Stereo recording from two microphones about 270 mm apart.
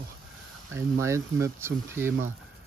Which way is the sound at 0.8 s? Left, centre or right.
Centre.